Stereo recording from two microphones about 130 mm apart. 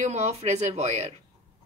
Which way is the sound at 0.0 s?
60° right (ahead or behind).